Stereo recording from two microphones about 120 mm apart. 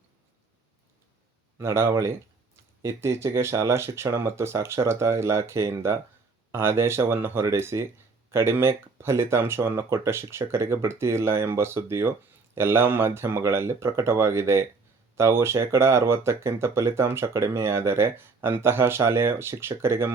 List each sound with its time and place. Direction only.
1.5 s speech: 20° right (ahead or behind)